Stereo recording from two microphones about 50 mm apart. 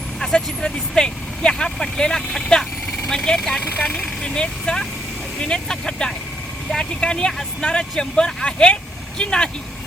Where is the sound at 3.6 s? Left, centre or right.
Left.